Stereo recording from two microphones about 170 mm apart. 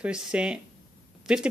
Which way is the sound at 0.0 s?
5° right (ahead or behind).